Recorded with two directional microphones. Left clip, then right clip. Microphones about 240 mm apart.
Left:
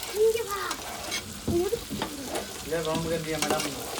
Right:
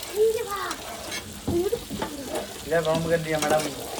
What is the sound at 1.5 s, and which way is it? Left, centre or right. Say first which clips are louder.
Stir: right 1 dB; centre.